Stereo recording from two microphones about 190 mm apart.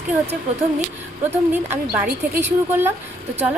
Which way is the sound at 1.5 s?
10° right (ahead or behind).